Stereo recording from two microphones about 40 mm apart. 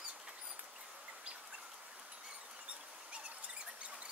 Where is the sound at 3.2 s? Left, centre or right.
Right.